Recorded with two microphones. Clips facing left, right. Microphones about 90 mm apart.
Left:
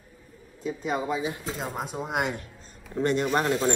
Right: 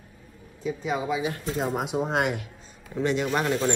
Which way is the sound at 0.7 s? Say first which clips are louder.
Right 1 dB; centre (ahead or behind).